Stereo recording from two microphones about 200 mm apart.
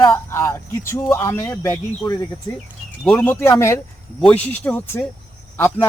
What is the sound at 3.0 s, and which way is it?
Speech, 5° left (ahead or behind).